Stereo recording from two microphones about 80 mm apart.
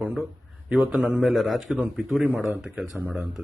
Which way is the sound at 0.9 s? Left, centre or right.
Centre.